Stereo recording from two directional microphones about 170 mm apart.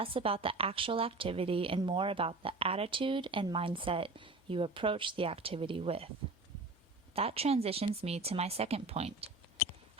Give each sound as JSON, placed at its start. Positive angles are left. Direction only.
{"t": 0.0, "sound": "a woman's voice", "side_deg": -35}
{"t": 7.2, "sound": "a woman's voice", "side_deg": -35}